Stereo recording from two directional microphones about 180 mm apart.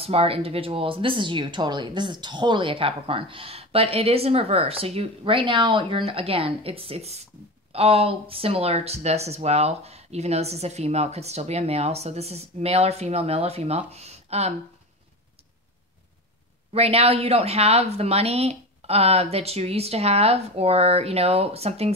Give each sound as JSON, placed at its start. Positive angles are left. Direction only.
{"t": 0.0, "sound": "speech", "side_deg": -30}
{"t": 16.7, "sound": "speech", "side_deg": -35}